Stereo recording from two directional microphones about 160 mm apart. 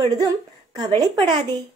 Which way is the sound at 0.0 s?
25° right (ahead or behind).